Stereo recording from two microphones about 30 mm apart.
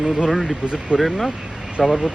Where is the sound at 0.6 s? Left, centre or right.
Right.